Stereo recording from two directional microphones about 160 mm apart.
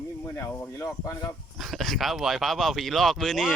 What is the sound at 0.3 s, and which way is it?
Speech, 15° left (ahead or behind).